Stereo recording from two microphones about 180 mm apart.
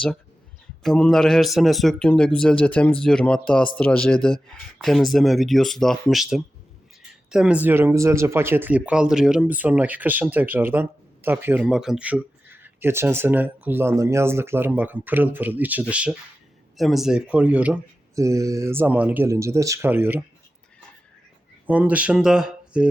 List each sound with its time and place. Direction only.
0.8 s speech: 5° left (ahead or behind)
21.7 s speech: 10° right (ahead or behind)